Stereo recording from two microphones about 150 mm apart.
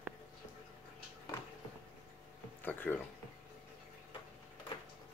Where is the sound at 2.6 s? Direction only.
15° left (ahead or behind).